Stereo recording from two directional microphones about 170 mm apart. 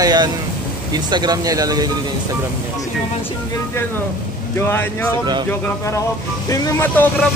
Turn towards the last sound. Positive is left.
turn(degrees=15)  # may be behind; listen again after turning